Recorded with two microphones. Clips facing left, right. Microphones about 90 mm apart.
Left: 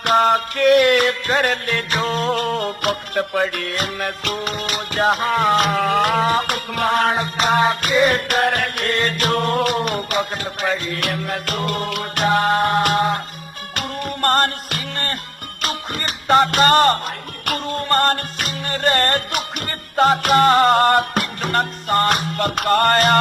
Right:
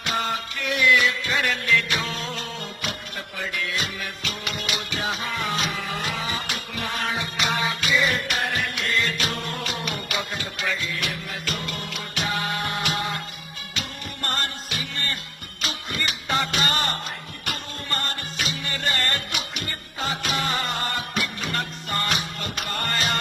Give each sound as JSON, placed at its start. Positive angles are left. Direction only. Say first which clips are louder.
{"t": 0.0, "sound": "music", "louder": "left 11 dB", "side_deg": 55}
{"t": 7.3, "sound": "music", "louder": "left 9 dB", "side_deg": 45}
{"t": 10.9, "sound": "music", "louder": "left 8 dB", "side_deg": 60}